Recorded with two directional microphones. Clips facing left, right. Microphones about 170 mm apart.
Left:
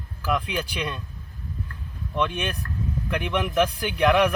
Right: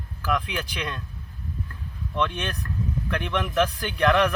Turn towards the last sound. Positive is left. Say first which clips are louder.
# left 1 dB
turn(degrees=10)  # may be behind; listen again after turning